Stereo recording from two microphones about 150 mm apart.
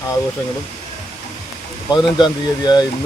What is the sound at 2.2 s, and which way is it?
Speech, 25° left (ahead or behind).